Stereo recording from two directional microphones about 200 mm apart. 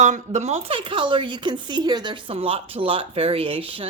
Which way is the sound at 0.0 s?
35° right (ahead or behind).